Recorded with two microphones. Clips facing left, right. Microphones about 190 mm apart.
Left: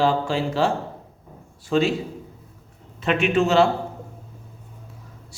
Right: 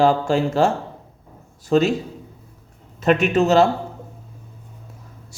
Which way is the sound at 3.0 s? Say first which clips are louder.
Right 3 dB; 40° right (ahead or behind).